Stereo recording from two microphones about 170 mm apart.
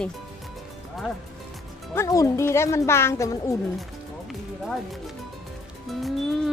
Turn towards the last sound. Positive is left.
turn(degrees=0)  # may be behind; listen again after turning